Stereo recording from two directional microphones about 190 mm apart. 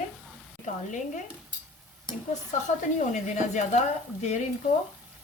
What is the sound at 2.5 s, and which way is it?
A woman's voice, 40° left (ahead or behind).